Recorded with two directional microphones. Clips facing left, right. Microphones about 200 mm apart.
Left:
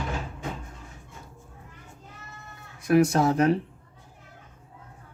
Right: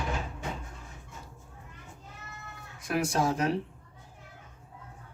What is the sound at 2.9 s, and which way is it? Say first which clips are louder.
Speech: left 8 dB; 60° left (ahead or behind).